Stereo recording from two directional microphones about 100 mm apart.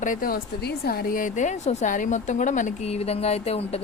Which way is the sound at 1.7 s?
90° left.